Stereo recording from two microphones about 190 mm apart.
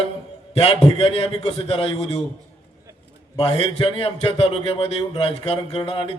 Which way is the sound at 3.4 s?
30° left (ahead or behind).